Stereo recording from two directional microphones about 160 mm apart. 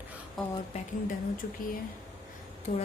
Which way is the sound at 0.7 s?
40° left (ahead or behind).